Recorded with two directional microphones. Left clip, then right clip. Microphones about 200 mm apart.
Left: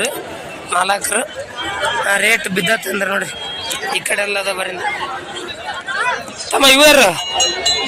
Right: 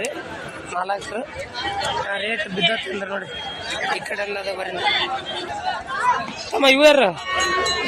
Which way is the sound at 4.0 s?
5° left (ahead or behind).